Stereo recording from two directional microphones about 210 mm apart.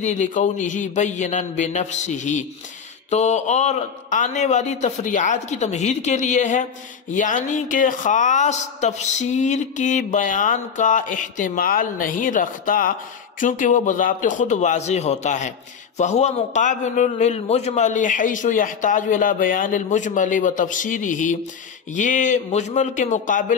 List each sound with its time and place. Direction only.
0.0 s a man's voice: 35° left (ahead or behind)